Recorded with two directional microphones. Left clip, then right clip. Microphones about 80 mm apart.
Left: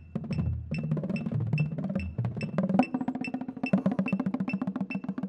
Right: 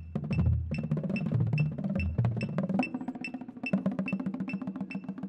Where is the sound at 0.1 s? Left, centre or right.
Centre.